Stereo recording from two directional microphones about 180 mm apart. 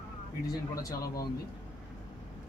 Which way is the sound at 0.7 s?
20° left (ahead or behind).